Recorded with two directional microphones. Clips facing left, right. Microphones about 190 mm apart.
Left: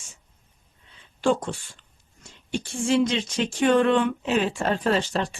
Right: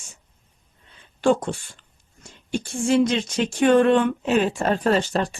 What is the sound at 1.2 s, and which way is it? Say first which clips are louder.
Speech: right 3 dB; 55° right (ahead or behind).